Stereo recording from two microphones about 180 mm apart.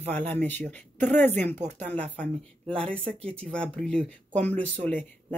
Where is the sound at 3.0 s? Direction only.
35° right (ahead or behind).